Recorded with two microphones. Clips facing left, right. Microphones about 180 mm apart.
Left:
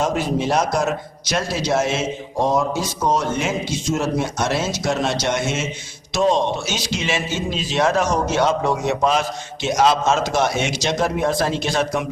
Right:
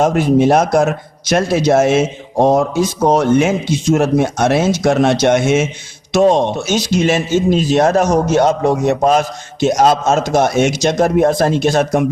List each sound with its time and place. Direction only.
0.0 s speech: 55° right (ahead or behind)